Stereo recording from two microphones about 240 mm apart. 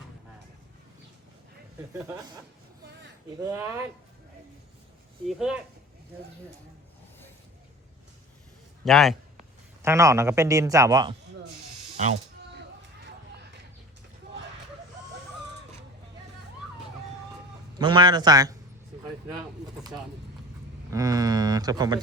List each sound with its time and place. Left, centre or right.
2.0 s a man's voice: centre
3.4 s a man's voice: centre
5.2 s speech: centre
8.8 s a man's voice: centre
9.8 s a man's voice: centre
17.7 s a man's voice: centre
20.9 s a man's voice: centre